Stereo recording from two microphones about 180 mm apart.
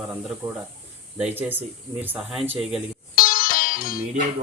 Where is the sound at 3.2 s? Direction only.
50° left (ahead or behind).